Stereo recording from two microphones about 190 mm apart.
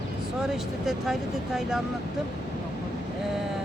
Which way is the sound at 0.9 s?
Centre (ahead or behind).